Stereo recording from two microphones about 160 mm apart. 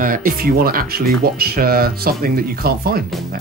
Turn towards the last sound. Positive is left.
turn(degrees=-70)  # may be behind; listen again after turning